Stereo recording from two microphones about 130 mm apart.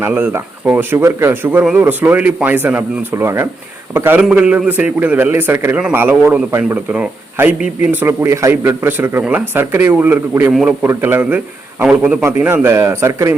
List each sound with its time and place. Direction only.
0.0 s a man's voice: 15° right (ahead or behind)